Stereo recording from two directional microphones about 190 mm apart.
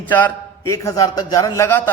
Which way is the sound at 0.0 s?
10° left (ahead or behind).